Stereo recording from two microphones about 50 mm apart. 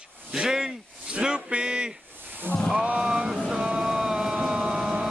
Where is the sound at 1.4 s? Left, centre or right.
Centre.